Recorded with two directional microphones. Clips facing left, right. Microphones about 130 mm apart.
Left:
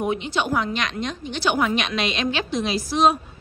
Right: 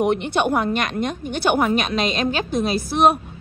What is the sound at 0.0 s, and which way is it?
A woman's voice, 60° right (ahead or behind).